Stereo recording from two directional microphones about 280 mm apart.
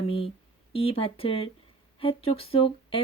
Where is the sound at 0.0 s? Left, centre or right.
Centre.